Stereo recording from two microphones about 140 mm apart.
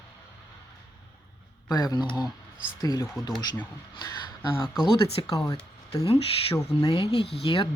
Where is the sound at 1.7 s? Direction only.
25° left (ahead or behind).